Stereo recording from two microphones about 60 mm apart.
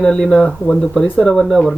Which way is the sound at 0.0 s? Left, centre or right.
Centre.